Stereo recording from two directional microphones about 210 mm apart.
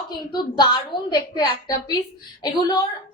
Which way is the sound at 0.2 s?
20° left (ahead or behind).